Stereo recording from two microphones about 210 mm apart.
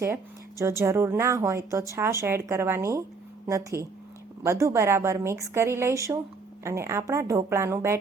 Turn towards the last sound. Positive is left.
turn(degrees=-10)  # may be behind; listen again after turning